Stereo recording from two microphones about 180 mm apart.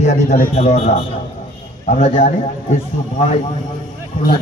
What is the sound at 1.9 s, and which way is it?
Speech, 35° left (ahead or behind).